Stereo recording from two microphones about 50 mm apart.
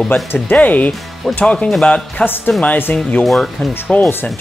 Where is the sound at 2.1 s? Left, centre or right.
Left.